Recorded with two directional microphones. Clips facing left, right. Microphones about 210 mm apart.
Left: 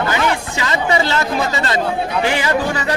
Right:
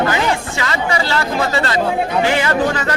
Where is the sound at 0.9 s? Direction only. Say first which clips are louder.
Left 3 dB; 20° left (ahead or behind).